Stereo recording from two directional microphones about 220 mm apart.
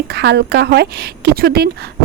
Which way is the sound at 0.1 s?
50° right (ahead or behind).